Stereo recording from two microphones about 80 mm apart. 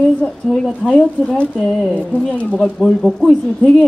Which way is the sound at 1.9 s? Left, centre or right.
Centre.